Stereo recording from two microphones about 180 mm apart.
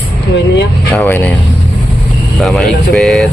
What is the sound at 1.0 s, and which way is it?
Speech, 15° left (ahead or behind).